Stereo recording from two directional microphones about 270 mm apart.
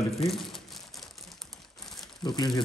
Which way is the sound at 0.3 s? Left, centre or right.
Centre.